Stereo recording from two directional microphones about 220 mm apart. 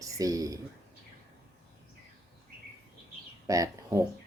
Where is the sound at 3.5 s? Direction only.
15° right (ahead or behind).